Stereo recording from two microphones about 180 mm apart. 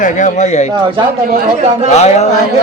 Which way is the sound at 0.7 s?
30° right (ahead or behind).